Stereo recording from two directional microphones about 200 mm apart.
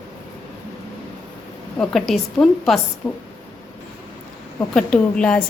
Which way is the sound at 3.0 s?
20° left (ahead or behind).